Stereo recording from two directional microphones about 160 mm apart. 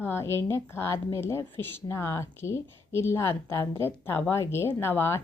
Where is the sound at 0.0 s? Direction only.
15° left (ahead or behind).